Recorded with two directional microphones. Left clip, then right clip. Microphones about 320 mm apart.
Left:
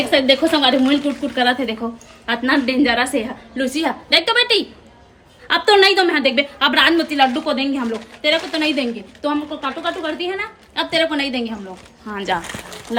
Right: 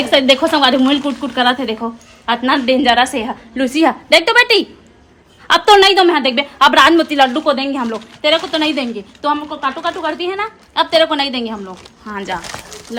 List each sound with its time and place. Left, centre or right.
0.1 s a woman's voice: centre
3.5 s a woman's voice: right; by 12.4 s centre